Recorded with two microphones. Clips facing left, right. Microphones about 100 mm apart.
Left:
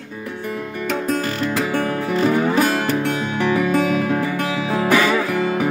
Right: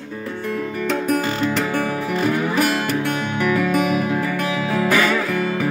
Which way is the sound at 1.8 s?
15° right (ahead or behind).